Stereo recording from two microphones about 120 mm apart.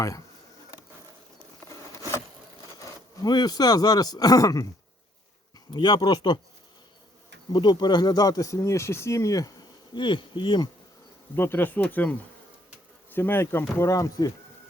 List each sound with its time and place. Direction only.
3.2 s speech: 35° left (ahead or behind)
5.7 s speech: 40° left (ahead or behind)
7.5 s speech: 40° left (ahead or behind)
10.0 s speech: 45° left (ahead or behind)
11.3 s speech: 15° left (ahead or behind)
13.1 s speech: 15° left (ahead or behind)